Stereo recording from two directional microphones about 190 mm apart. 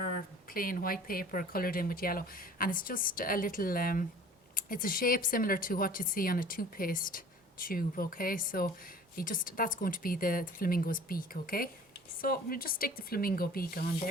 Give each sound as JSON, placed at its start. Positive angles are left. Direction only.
{"t": 0.5, "sound": "speech", "side_deg": 50}